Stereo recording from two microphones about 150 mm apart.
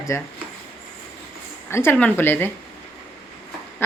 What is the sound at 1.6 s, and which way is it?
Speech, 15° left (ahead or behind).